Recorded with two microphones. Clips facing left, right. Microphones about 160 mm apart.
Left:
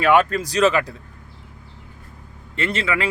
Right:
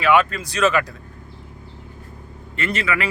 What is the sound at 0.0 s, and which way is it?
Speech, 40° left (ahead or behind).